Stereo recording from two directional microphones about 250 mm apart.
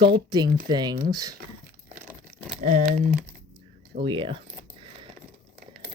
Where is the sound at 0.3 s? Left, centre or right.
Centre.